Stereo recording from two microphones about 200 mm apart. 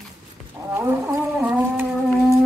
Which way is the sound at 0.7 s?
10° right (ahead or behind).